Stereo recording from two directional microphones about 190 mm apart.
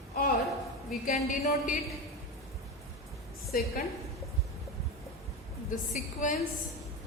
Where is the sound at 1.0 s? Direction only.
45° left (ahead or behind).